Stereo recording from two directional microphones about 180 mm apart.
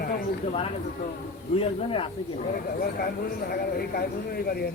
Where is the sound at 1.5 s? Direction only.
30° left (ahead or behind).